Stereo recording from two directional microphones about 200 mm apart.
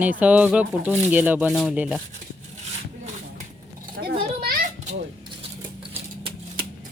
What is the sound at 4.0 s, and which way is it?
Children playing, 50° right (ahead or behind).